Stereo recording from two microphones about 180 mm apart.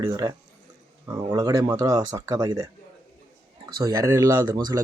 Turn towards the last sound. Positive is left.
turn(degrees=-20)  # may be behind; listen again after turning